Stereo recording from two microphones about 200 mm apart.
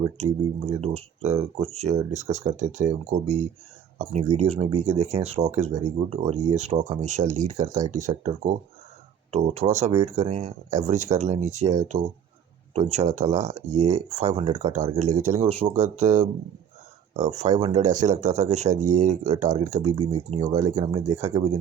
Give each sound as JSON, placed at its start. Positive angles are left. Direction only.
{"t": 0.0, "sound": "speech", "side_deg": -35}
{"t": 20.6, "sound": "speech", "side_deg": -15}